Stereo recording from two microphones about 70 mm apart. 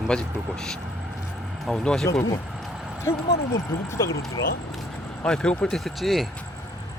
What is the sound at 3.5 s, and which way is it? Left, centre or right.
Speech, left.